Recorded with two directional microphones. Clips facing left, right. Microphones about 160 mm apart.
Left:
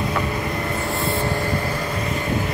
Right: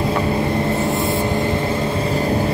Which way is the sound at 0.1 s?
30° right (ahead or behind).